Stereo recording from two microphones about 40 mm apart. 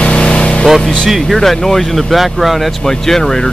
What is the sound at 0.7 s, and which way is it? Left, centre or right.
Speech, centre.